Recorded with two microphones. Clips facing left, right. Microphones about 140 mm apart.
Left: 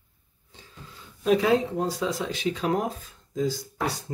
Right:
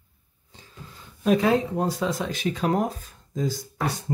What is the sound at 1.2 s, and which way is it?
Speech, 50° right (ahead or behind).